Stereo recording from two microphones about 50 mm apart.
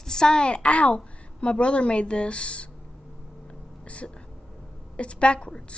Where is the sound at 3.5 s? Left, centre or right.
Left.